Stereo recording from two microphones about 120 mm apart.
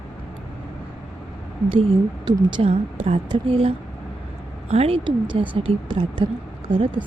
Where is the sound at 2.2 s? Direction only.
45° right (ahead or behind).